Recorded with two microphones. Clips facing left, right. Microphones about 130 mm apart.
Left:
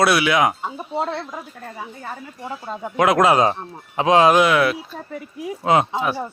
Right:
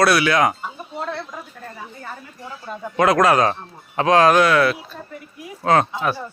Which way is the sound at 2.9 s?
15° left (ahead or behind).